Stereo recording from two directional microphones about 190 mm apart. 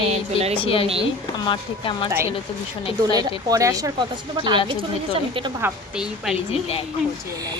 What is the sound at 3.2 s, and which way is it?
Speech, 20° right (ahead or behind).